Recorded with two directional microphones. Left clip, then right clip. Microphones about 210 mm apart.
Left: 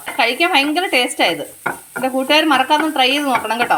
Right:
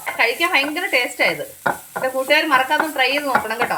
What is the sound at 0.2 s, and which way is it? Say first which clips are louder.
A woman's voice: left 3 dB; 40° left (ahead or behind).